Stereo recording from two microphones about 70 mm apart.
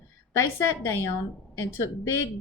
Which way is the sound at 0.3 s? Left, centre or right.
Left.